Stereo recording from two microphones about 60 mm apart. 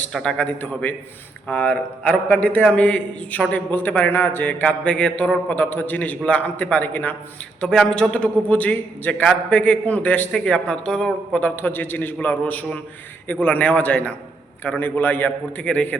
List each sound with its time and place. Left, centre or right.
0.1 s speech: centre
0.6 s a man's voice: left
5.5 s a man's voice: left
7.6 s a man's voice: centre
11.3 s a man's voice: left